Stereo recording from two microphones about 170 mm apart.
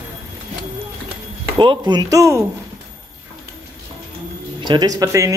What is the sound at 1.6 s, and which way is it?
Speech, 25° right (ahead or behind).